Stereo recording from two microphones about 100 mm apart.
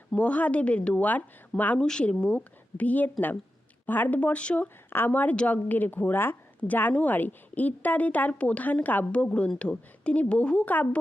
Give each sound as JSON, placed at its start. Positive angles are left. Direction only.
{"t": 0.2, "sound": "a woman's voice", "side_deg": 15}